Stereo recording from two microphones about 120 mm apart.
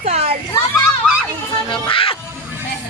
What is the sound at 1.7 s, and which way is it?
Music, 45° left (ahead or behind).